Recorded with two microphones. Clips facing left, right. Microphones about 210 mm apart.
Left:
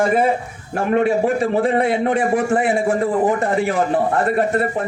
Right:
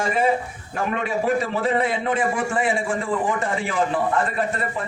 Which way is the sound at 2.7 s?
40° left (ahead or behind).